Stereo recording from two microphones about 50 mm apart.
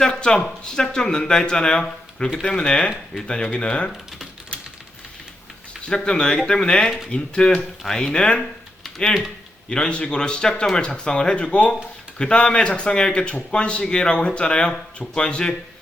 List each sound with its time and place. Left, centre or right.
0.0 s a sound: centre
0.6 s a man's voice: centre
5.8 s speech: centre
9.6 s a man's voice: centre